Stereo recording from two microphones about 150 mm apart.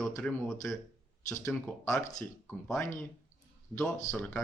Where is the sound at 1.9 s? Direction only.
20° left (ahead or behind).